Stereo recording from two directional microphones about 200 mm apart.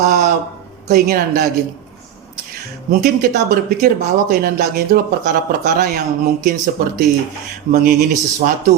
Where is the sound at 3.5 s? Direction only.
50° right (ahead or behind).